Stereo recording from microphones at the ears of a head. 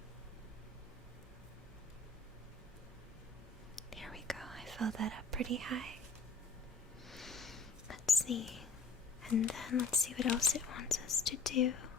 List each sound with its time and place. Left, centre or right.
4.8 s speech: right
7.9 s whispering: left
9.3 s speech: left